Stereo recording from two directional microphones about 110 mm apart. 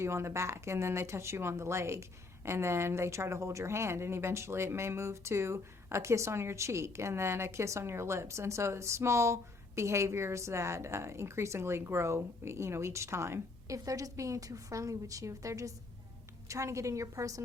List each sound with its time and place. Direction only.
0.0 s speech: 25° right (ahead or behind)